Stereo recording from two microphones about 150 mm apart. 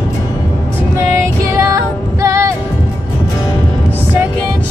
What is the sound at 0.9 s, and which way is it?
Music, 20° right (ahead or behind).